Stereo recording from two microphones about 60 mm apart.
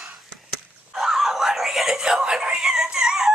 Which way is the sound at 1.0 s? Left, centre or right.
Centre.